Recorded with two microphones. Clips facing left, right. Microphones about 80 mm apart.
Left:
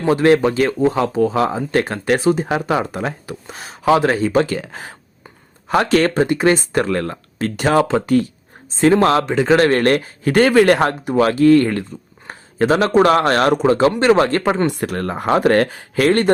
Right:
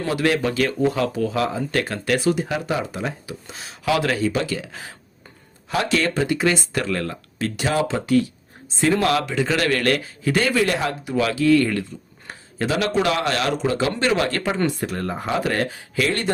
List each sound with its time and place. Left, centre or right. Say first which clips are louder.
0.1 s a man's voice: left 8 dB; left
14.7 s a man's voice: left 4 dB; left